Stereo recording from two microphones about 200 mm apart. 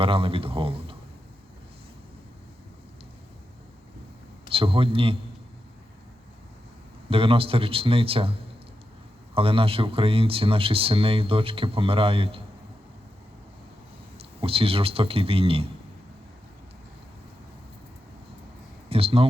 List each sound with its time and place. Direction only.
0.0 s speech: 25° right (ahead or behind)
4.4 s a man's voice: 25° right (ahead or behind)
7.1 s speech: 30° right (ahead or behind)
14.4 s speech: 30° right (ahead or behind)
18.9 s speech: 30° right (ahead or behind)